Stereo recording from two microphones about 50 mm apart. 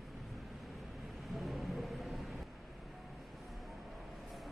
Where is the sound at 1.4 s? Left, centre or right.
Centre.